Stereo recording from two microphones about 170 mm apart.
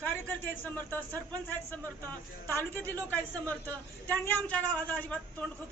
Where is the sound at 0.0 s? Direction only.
10° left (ahead or behind).